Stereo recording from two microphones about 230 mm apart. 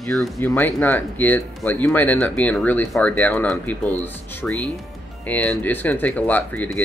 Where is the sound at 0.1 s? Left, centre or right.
Centre.